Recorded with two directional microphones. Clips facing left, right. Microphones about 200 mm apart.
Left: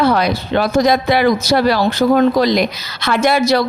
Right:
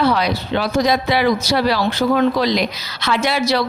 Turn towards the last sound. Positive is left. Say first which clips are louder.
# left 4 dB
turn(degrees=50)  # may be behind; listen again after turning